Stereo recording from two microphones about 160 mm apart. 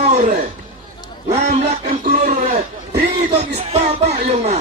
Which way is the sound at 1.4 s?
50° right (ahead or behind).